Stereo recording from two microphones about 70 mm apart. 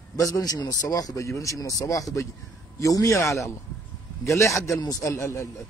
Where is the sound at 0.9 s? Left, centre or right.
Left.